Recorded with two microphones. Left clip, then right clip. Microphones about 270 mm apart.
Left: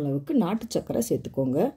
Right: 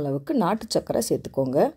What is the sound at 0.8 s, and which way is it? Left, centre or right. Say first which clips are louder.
Speech: right 3 dB; right.